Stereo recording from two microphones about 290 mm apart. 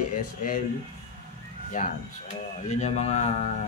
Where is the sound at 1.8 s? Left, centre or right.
Left.